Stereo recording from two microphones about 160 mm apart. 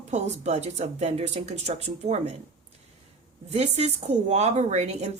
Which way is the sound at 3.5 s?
40° right (ahead or behind).